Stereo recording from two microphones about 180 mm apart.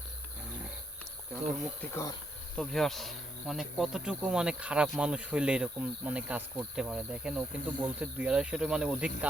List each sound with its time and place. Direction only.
1.3 s speech: centre (ahead or behind)
1.9 s insect: 15° left (ahead or behind)
2.6 s speech: 5° left (ahead or behind)